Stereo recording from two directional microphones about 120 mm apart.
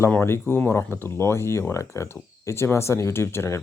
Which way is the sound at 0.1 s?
20° left (ahead or behind).